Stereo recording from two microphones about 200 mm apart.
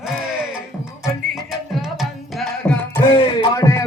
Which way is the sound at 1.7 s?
Centre (ahead or behind).